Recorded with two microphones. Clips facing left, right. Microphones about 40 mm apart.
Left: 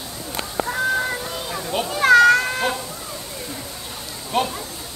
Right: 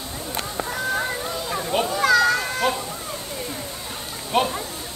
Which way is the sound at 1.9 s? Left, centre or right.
Left.